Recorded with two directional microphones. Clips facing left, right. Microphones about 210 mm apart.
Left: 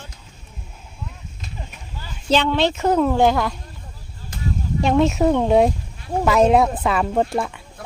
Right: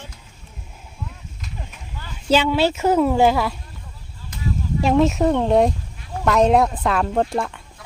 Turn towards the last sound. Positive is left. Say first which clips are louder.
# left 7 dB
turn(degrees=55)  # may be behind; listen again after turning